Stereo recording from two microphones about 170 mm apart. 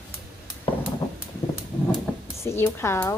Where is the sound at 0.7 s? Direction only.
30° left (ahead or behind).